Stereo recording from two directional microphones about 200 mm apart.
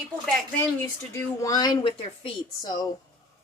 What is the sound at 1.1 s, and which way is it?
Speech, 15° left (ahead or behind).